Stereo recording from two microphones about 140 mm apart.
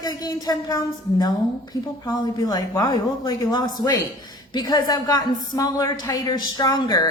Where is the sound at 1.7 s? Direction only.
30° left (ahead or behind).